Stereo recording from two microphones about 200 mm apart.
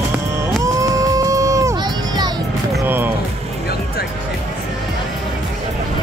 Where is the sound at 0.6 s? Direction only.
15° right (ahead or behind).